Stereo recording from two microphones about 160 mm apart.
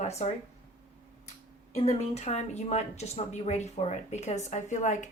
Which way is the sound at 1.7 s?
40° left (ahead or behind).